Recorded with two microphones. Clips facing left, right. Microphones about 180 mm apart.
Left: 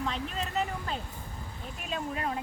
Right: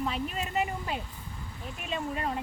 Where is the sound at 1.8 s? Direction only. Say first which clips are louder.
Right 1 dB; centre (ahead or behind).